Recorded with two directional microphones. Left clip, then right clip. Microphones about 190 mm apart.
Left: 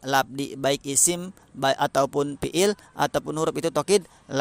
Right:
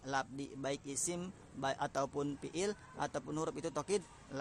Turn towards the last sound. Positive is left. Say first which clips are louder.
# left 16 dB
turn(degrees=35)  # may be behind; listen again after turning